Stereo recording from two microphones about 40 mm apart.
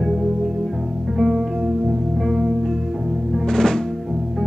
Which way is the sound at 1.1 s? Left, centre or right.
Centre.